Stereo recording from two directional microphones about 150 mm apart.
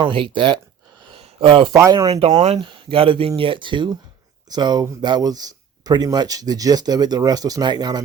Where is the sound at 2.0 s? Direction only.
45° right (ahead or behind).